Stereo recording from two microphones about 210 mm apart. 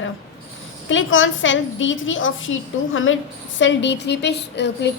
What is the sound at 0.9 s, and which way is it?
A woman's voice, 65° left (ahead or behind).